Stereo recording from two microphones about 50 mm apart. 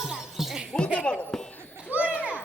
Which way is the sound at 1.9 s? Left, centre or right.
Right.